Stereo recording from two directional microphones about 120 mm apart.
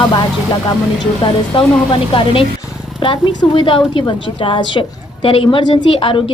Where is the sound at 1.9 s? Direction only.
45° left (ahead or behind).